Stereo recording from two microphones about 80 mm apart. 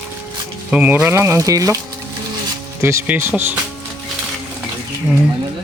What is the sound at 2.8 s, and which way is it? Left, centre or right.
Speech, right.